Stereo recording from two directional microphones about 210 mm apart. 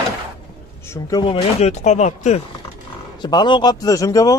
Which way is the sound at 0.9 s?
20° left (ahead or behind).